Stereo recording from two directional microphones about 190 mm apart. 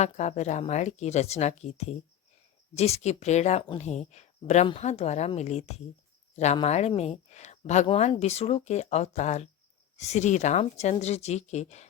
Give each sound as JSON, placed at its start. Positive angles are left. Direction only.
{"t": 0.0, "sound": "speech", "side_deg": 35}